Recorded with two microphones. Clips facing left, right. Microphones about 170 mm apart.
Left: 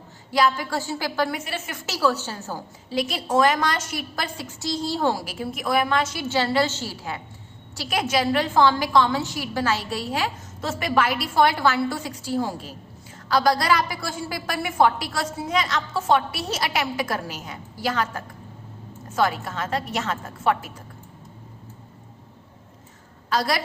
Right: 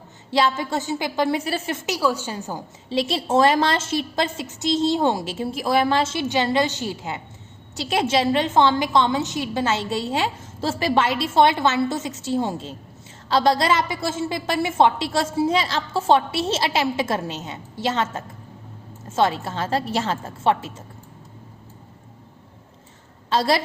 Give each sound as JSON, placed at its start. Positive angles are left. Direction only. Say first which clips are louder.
{"t": 0.3, "sound": "a woman's voice", "louder": "right 1 dB", "side_deg": -25}
{"t": 1.4, "sound": "a woman's voice", "louder": "right 6 dB", "side_deg": -35}
{"t": 1.9, "sound": "a woman's voice", "louder": "even", "side_deg": -15}
{"t": 2.9, "sound": "a woman's voice", "louder": "right 2 dB", "side_deg": -30}
{"t": 23.3, "sound": "a woman's voice", "louder": "right 4 dB", "side_deg": -25}